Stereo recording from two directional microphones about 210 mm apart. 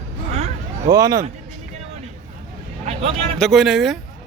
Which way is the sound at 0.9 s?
15° right (ahead or behind).